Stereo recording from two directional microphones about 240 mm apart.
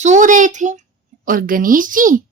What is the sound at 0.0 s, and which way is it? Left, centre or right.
A child's voice, right.